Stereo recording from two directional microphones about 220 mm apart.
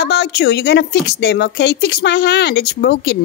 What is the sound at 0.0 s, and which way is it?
A woman's voice, 50° left (ahead or behind).